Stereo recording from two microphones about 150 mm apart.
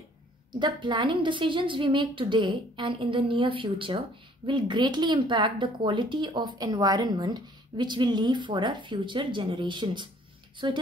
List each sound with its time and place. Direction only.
0.5 s a woman's voice: 30° right (ahead or behind)